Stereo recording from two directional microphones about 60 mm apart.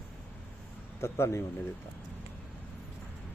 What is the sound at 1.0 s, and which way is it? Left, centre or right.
Speech, left.